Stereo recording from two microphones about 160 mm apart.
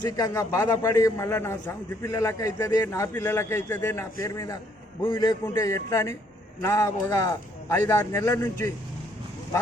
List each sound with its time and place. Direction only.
0.0 s a man's voice: 20° left (ahead or behind)